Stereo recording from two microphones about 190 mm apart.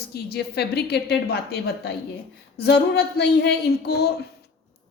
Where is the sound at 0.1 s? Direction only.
60° left (ahead or behind).